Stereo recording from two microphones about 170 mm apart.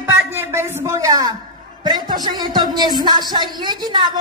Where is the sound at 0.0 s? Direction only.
15° right (ahead or behind).